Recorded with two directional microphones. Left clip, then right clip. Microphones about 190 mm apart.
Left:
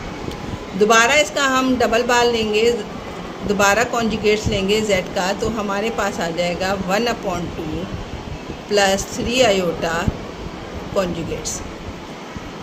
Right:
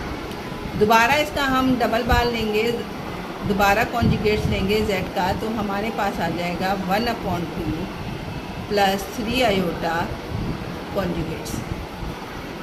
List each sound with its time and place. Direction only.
0.9 s a woman's voice: 20° left (ahead or behind)
8.7 s a woman's voice: 20° left (ahead or behind)